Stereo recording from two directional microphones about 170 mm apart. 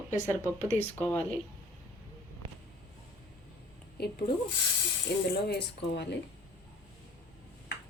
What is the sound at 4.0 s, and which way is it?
Speech, 70° left (ahead or behind).